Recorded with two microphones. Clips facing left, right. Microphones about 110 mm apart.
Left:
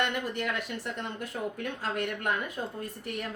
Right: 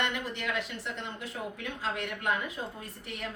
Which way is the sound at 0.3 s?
45° left (ahead or behind).